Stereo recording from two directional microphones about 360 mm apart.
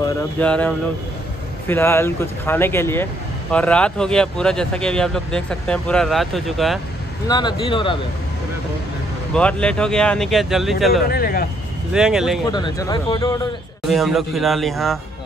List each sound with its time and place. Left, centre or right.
0.0 s speech: centre
7.2 s speech: centre
9.3 s speech: centre
11.1 s speech: left
11.9 s speech: centre
12.4 s speech: centre
13.8 s speech: centre